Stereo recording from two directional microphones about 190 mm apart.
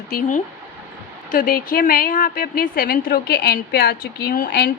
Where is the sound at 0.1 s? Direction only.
40° left (ahead or behind).